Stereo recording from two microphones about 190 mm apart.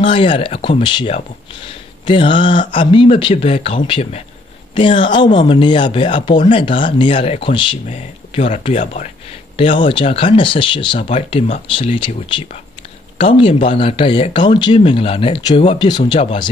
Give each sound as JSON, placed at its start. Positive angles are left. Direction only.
{"t": 0.0, "sound": "speech", "side_deg": 25}
{"t": 9.6, "sound": "speech", "side_deg": 25}